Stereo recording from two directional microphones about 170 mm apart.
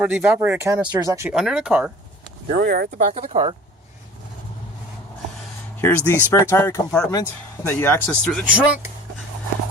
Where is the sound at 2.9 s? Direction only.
40° right (ahead or behind).